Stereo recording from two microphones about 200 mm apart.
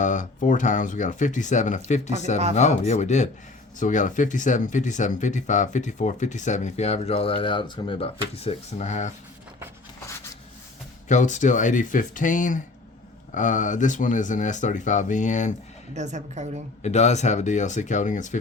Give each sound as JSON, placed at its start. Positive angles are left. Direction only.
{"t": 0.0, "sound": "speech", "side_deg": 40}
{"t": 11.1, "sound": "speech", "side_deg": 35}
{"t": 16.0, "sound": "a woman's voice", "side_deg": -35}
{"t": 16.8, "sound": "speech", "side_deg": 35}